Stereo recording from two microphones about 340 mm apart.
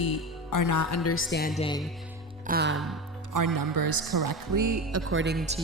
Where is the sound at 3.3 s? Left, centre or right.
Right.